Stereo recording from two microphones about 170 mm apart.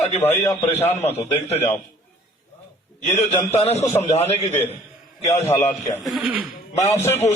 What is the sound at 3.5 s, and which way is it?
Speech, 40° left (ahead or behind).